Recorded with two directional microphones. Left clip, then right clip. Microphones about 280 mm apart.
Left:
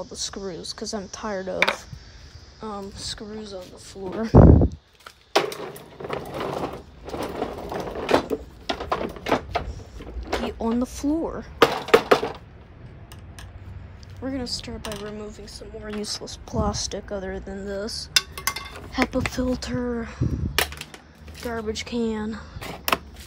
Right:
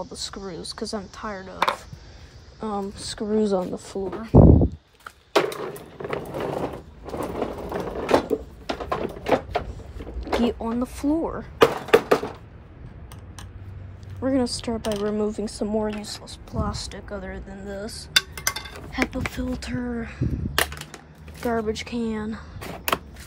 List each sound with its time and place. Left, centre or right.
0.0 s a woman's voice: centre
2.6 s speech: centre
4.3 s speech: centre
5.0 s a sound: centre
14.2 s speech: centre
15.9 s a woman's voice: centre
21.4 s speech: centre